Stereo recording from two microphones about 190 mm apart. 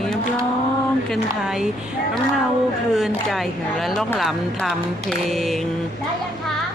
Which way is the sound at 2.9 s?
Centre (ahead or behind).